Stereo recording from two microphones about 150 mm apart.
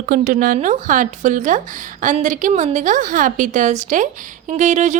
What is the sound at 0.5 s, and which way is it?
A woman's voice, 55° right (ahead or behind).